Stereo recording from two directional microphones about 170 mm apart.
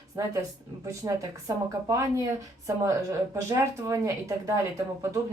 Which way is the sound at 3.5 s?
20° right (ahead or behind).